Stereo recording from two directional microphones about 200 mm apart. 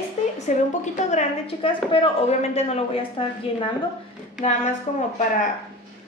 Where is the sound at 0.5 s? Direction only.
35° left (ahead or behind).